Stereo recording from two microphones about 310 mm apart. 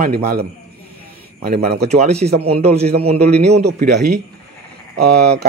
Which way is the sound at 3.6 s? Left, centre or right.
Right.